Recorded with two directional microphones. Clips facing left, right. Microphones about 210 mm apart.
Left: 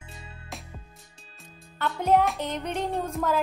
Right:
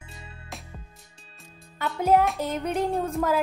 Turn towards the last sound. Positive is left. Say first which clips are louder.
# right 3 dB
turn(degrees=-5)  # may be behind; listen again after turning